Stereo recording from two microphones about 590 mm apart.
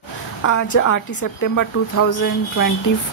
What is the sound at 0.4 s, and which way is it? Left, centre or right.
Speech, left.